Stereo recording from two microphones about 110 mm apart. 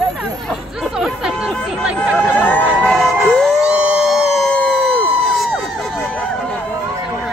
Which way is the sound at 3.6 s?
10° right (ahead or behind).